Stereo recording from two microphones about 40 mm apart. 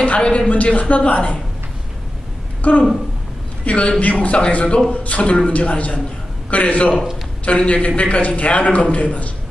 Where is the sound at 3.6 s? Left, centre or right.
Left.